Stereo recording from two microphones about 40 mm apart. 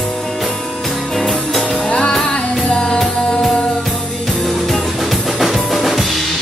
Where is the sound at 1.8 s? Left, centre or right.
Left.